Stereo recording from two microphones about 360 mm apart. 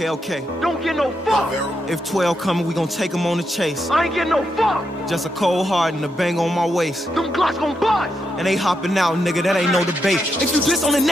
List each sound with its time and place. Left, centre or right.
0.6 s speech: centre